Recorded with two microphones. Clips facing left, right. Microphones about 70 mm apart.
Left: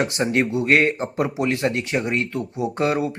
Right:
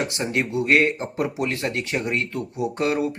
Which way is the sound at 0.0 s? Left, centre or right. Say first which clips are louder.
Left 4 dB; left.